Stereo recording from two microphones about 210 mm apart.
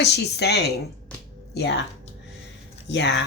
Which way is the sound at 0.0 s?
50° left (ahead or behind).